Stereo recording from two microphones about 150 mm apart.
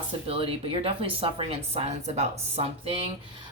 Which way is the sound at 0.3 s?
40° right (ahead or behind).